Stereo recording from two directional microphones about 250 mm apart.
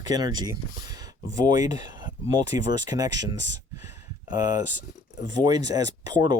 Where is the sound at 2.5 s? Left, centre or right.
Centre.